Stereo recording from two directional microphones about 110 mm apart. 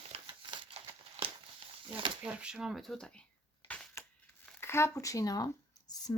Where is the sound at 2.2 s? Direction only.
10° right (ahead or behind).